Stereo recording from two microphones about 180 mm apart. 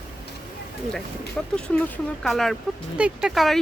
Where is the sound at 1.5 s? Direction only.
5° left (ahead or behind).